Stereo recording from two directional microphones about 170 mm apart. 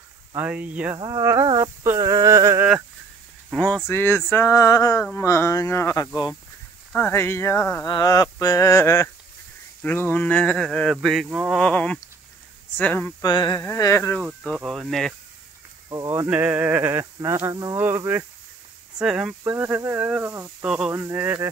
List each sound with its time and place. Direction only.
0.4 s speech: 10° right (ahead or behind)
0.9 s speech: 25° right (ahead or behind)
3.5 s speech: 5° left (ahead or behind)
6.9 s speech: 10° left (ahead or behind); by 11.6 s 5° right (ahead or behind)
11.6 s speech: 5° left (ahead or behind)
13.2 s speech: 25° left (ahead or behind)
14.2 s speech: 5° right (ahead or behind)
15.9 s speech: 20° right (ahead or behind)
16.3 s speech: 10° right (ahead or behind)